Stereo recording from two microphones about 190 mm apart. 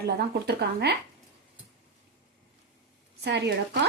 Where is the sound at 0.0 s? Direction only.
55° right (ahead or behind).